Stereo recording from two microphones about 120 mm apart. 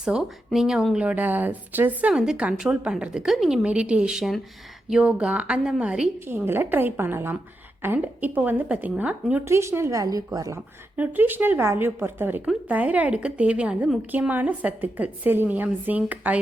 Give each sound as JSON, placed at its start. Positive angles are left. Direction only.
{"t": 0.0, "sound": "a woman's voice", "side_deg": -5}
{"t": 10.9, "sound": "speech", "side_deg": -15}